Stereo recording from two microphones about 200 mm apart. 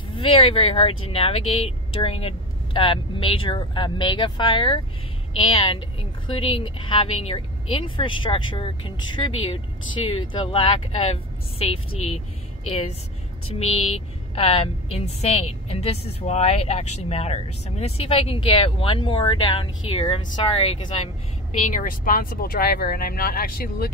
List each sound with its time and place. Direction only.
0.1 s speech: 30° left (ahead or behind)
13.9 s a woman's voice: 30° left (ahead or behind); by 23.9 s 50° left (ahead or behind)